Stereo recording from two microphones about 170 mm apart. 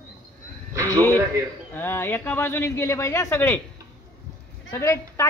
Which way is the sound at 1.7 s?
10° left (ahead or behind).